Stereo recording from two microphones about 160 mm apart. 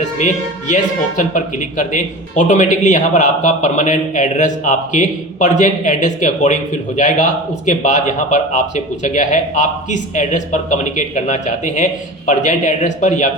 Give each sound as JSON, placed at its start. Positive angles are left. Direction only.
{"t": 0.7, "sound": "speech", "side_deg": 50}